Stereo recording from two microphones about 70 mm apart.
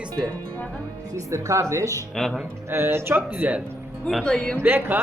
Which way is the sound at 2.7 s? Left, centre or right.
Right.